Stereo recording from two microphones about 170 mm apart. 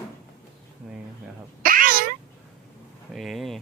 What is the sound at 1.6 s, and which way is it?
Cat, 55° right (ahead or behind).